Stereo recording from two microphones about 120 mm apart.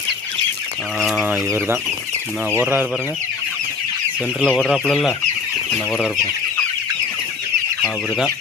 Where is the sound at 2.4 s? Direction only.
15° right (ahead or behind).